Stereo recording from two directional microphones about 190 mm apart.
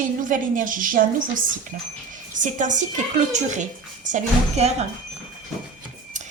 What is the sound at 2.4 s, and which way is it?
A woman's voice, 40° right (ahead or behind).